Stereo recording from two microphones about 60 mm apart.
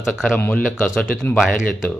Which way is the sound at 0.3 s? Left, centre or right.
Left.